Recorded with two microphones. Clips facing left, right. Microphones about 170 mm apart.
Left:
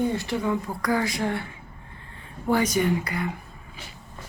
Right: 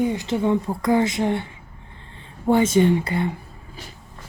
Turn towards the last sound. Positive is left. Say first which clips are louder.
# right 6 dB
turn(degrees=-30)  # may be behind; listen again after turning